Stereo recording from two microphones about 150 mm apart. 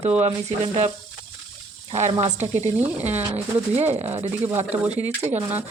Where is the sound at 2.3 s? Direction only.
50° right (ahead or behind).